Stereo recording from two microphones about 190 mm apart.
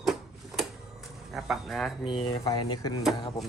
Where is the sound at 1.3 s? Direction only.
Centre (ahead or behind).